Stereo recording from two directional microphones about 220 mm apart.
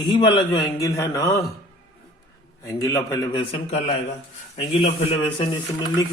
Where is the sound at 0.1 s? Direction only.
20° left (ahead or behind).